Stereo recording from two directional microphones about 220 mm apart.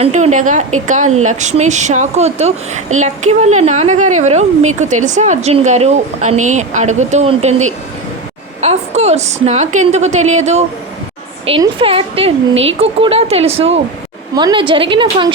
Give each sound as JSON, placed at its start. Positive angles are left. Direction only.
{"t": 0.0, "sound": "a woman's voice", "side_deg": -30}